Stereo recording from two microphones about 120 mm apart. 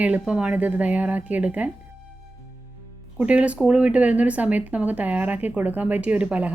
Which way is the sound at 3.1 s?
10° right (ahead or behind).